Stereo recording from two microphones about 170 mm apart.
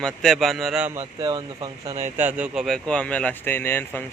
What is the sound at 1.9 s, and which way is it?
Speech, 45° right (ahead or behind).